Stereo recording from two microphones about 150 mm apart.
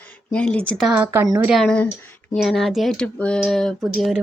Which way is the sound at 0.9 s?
10° right (ahead or behind).